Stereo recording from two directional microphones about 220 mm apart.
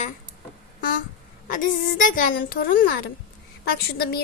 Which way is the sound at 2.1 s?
40° left (ahead or behind).